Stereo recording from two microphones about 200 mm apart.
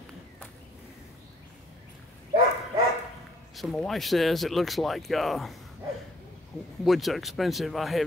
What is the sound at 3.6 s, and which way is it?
Speech, centre (ahead or behind).